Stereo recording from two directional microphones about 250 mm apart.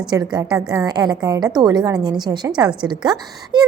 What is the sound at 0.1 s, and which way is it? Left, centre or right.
A woman's voice, centre.